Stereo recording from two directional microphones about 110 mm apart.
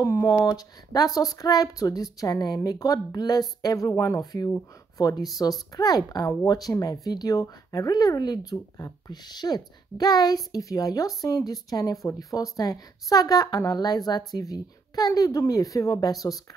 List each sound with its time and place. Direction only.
0.0 s speech: 25° left (ahead or behind)
0.3 s speech: 35° left (ahead or behind)